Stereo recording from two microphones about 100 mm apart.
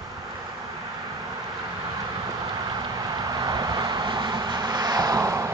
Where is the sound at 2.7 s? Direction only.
45° right (ahead or behind).